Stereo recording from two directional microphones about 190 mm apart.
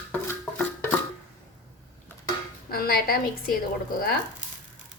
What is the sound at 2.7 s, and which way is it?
Speech, 50° left (ahead or behind).